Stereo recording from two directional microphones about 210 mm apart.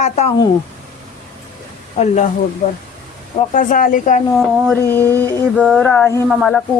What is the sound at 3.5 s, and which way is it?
Speech, 40° left (ahead or behind).